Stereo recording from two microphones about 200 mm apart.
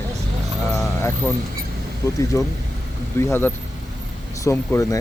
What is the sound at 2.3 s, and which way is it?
Speech, 15° left (ahead or behind).